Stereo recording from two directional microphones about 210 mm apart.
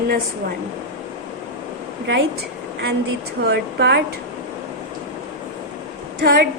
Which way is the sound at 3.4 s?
55° right (ahead or behind).